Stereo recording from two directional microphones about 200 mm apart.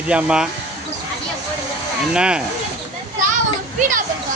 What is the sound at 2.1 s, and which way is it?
Speech, 5° right (ahead or behind).